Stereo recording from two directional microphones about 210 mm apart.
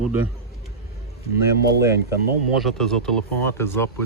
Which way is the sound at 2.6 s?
Centre (ahead or behind).